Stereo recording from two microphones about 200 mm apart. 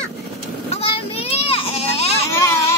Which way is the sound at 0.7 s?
30° left (ahead or behind).